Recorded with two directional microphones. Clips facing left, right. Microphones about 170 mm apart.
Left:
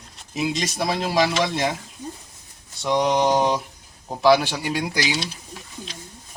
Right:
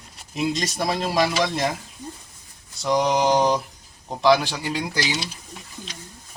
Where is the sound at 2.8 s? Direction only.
Centre (ahead or behind).